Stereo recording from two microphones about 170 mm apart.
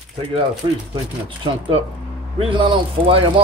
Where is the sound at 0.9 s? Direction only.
30° right (ahead or behind).